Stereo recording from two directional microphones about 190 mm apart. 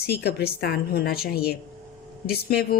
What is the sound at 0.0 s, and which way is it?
A woman's voice, 55° left (ahead or behind).